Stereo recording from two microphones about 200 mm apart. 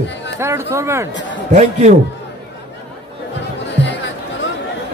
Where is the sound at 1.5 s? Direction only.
35° right (ahead or behind).